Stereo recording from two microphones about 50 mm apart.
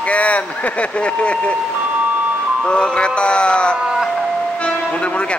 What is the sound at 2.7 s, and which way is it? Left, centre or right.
Speech, centre.